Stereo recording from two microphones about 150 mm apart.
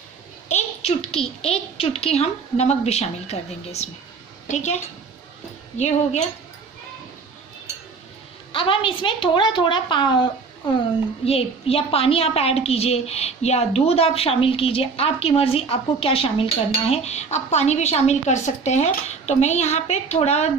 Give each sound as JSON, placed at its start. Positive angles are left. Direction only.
{"t": 0.5, "sound": "a woman's voice", "side_deg": 45}
{"t": 8.5, "sound": "a woman's voice", "side_deg": 35}